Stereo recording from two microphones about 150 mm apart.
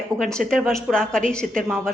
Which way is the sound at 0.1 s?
20° right (ahead or behind).